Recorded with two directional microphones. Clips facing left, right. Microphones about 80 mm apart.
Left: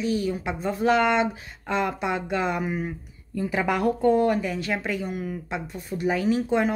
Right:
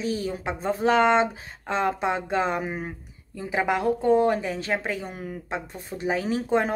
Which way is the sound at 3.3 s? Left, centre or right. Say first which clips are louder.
Even; right.